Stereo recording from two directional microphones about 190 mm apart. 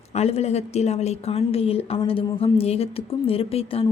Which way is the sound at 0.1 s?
35° left (ahead or behind).